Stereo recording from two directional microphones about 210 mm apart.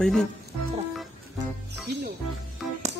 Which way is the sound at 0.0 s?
Centre (ahead or behind).